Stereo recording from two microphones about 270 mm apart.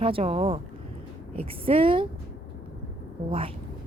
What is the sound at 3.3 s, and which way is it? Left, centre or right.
Speech, right.